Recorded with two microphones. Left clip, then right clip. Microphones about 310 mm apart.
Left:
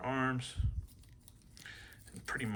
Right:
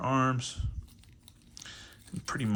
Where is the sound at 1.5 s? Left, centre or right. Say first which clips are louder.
Right 4 dB; centre.